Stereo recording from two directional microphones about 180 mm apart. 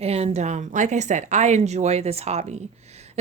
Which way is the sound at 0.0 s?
35° right (ahead or behind).